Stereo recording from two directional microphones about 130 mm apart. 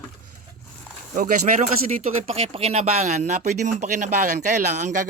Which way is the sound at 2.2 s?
50° right (ahead or behind).